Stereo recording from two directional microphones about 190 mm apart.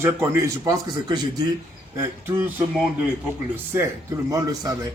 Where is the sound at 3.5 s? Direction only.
10° right (ahead or behind).